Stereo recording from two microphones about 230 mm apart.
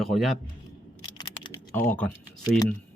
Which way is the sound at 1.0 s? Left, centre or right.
Centre.